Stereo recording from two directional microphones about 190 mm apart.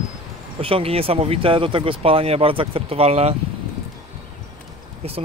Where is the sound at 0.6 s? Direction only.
30° right (ahead or behind).